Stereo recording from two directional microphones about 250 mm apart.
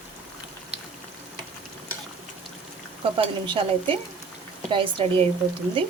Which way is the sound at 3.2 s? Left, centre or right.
Right.